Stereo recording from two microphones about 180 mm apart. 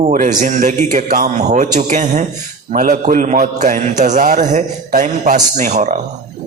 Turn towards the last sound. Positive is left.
turn(degrees=-40)  # may be behind; listen again after turning